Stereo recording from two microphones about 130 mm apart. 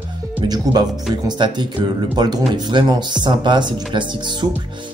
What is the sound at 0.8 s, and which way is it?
Speech, 30° right (ahead or behind).